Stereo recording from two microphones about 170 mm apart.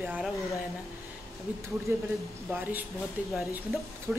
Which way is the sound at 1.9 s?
15° right (ahead or behind).